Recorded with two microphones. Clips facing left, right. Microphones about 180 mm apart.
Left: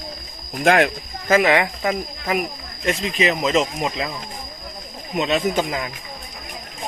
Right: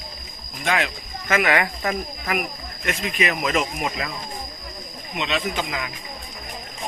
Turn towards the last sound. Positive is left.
turn(degrees=40)  # may be behind; listen again after turning